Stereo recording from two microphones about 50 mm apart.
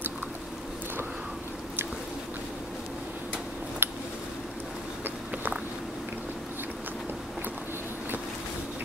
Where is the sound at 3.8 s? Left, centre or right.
Right.